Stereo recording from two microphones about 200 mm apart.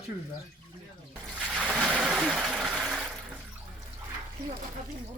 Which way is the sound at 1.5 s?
5° right (ahead or behind).